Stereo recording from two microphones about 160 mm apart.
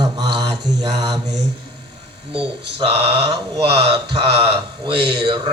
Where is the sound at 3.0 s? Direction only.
35° right (ahead or behind).